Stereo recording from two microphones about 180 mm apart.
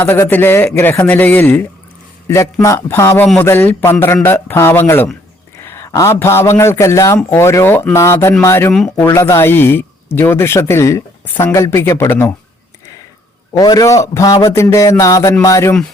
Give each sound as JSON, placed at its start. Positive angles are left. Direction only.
{"t": 0.0, "sound": "a man's voice", "side_deg": 15}
{"t": 8.7, "sound": "speech", "side_deg": 0}
{"t": 9.0, "sound": "speech", "side_deg": 15}
{"t": 13.5, "sound": "speech", "side_deg": 20}